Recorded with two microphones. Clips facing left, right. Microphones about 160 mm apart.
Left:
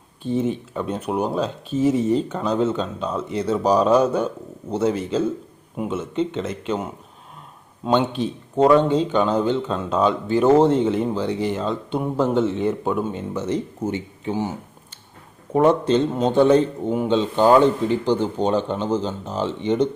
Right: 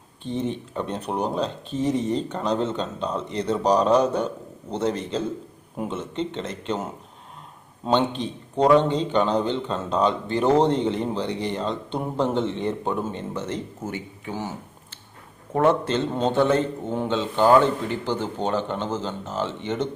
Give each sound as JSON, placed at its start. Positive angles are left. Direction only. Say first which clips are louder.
{"t": 0.3, "sound": "a man's voice", "louder": "left 5 dB", "side_deg": 5}
{"t": 8.2, "sound": "a man's voice", "louder": "left 4 dB", "side_deg": 5}
{"t": 15.5, "sound": "a man's voice", "louder": "left 4 dB", "side_deg": 15}